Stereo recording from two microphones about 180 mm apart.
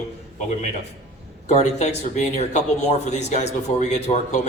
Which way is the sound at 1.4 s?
40° left (ahead or behind).